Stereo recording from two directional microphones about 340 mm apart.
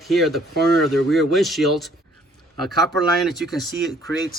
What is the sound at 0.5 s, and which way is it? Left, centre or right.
Speech, right.